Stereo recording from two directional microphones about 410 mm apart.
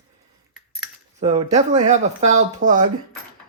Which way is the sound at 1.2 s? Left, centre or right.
Centre.